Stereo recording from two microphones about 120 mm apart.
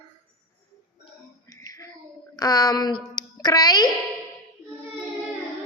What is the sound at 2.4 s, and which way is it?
A woman's voice, 30° left (ahead or behind).